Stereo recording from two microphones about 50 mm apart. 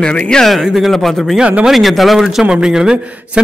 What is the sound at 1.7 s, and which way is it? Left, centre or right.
Speech, centre.